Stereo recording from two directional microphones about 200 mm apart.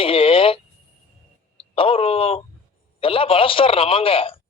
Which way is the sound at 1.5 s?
25° left (ahead or behind).